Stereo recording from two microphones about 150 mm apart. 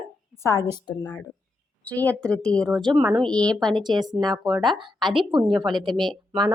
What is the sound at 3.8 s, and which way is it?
Speech, 30° right (ahead or behind).